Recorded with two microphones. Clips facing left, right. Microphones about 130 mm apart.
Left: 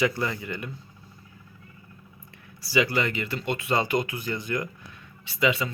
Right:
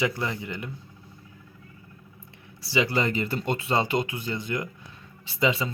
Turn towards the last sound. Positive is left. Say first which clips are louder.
# even
turn(degrees=-30)  # may be behind; listen again after turning